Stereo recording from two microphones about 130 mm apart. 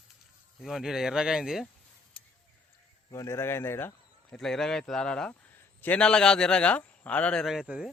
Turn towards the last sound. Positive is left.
turn(degrees=-5)  # may be behind; listen again after turning